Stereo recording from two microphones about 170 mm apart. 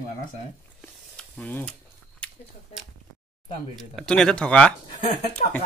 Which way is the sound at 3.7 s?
5° left (ahead or behind).